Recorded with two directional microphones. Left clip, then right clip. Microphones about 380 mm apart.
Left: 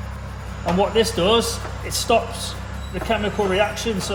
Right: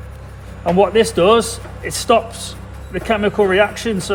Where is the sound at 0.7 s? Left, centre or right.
Right.